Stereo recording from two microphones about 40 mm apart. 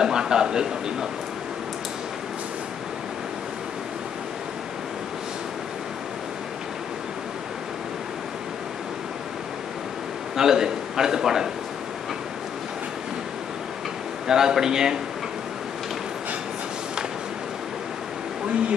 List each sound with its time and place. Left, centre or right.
0.0 s a man's voice: centre
10.3 s a man's voice: centre
14.2 s a man's voice: centre